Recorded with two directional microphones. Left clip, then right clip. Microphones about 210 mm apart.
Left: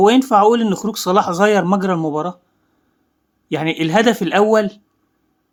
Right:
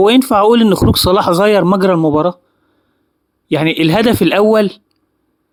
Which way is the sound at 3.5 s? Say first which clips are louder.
Right 6 dB; 30° right (ahead or behind).